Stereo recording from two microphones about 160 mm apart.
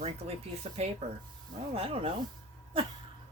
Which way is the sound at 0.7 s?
40° right (ahead or behind).